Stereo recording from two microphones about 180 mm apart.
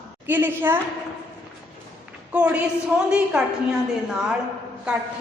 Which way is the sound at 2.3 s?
5° right (ahead or behind).